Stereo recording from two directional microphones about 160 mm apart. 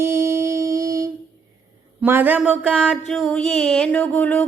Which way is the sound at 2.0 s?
10° right (ahead or behind).